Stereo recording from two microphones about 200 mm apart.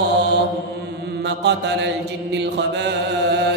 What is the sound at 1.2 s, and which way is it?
Mantra, 60° right (ahead or behind).